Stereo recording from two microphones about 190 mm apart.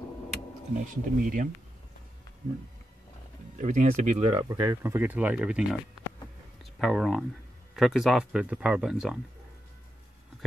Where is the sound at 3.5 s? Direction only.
40° right (ahead or behind).